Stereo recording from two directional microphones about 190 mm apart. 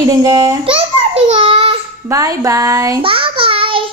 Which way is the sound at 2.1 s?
15° right (ahead or behind).